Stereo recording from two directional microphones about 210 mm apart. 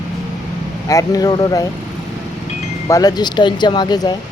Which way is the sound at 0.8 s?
15° left (ahead or behind).